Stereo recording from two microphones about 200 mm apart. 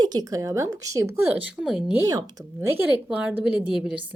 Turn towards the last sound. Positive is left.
turn(degrees=0)  # may be behind; listen again after turning